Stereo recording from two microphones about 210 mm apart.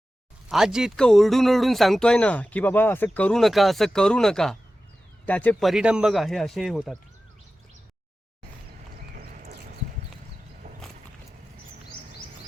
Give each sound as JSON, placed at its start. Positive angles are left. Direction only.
{"t": 0.4, "sound": "speech", "side_deg": 0}
{"t": 9.1, "sound": "clip-clop", "side_deg": -45}
{"t": 10.6, "sound": "walk", "side_deg": -30}